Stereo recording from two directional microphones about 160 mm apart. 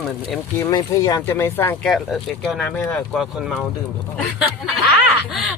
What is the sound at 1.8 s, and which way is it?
Speech, centre (ahead or behind).